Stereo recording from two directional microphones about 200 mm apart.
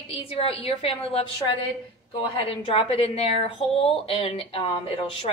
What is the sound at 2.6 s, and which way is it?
A woman's voice, 30° left (ahead or behind).